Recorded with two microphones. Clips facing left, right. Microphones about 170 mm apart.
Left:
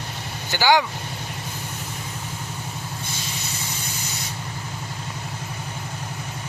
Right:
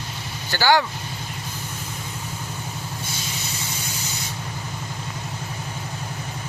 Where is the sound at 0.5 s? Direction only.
15° left (ahead or behind).